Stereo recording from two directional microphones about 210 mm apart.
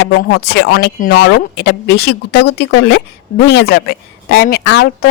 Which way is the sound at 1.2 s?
55° left (ahead or behind).